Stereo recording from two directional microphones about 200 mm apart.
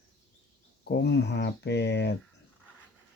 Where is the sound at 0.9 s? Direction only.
55° left (ahead or behind).